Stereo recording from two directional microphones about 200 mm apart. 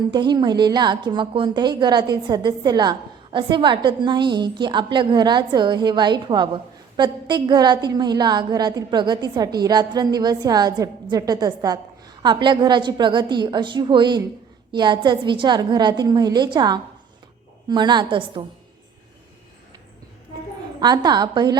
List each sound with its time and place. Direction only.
0.1 s a woman's voice: 20° right (ahead or behind)
20.8 s a woman's voice: 20° right (ahead or behind)